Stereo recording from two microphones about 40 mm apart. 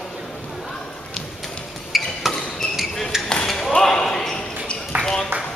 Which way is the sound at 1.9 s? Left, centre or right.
Centre.